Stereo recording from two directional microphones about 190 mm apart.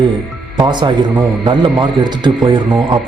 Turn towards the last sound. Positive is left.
turn(degrees=-25)  # may be behind; listen again after turning